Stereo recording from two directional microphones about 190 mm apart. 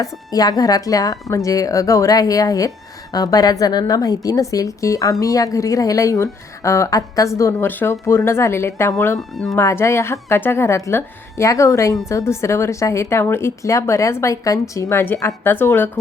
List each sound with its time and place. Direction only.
0.0 s speech: 20° left (ahead or behind)
9.1 s speech: centre (ahead or behind)
9.6 s speech: 15° left (ahead or behind)